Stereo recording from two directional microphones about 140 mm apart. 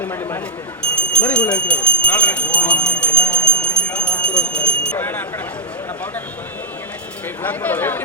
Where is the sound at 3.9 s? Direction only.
5° left (ahead or behind).